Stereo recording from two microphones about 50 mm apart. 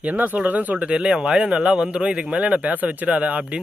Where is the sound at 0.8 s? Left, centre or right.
Right.